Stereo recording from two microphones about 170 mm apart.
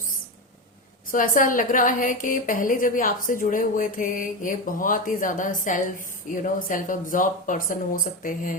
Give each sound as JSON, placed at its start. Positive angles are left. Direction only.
{"t": 1.1, "sound": "speech", "side_deg": 55}